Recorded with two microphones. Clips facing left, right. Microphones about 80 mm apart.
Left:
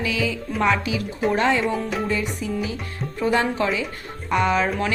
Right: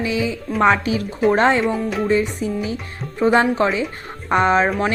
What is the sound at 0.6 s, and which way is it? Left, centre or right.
A woman's voice, right.